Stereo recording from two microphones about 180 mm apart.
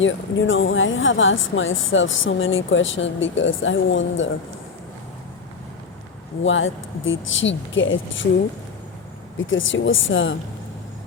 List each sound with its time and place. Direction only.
0.0 s a woman's voice: 90° left
6.4 s a woman's voice: 90° left
9.4 s a woman's voice: 90° left